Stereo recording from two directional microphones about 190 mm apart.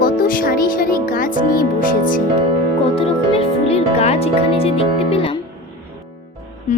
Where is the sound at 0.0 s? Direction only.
50° left (ahead or behind).